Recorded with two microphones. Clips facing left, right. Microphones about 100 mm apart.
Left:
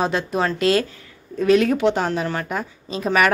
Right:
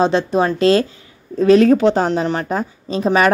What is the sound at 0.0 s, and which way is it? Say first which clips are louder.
A woman's voice: right 6 dB; 30° right (ahead or behind).